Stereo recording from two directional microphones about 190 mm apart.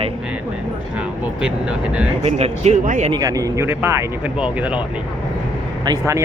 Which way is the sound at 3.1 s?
20° right (ahead or behind).